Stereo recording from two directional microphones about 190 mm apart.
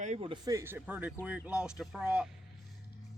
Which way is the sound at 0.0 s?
30° right (ahead or behind).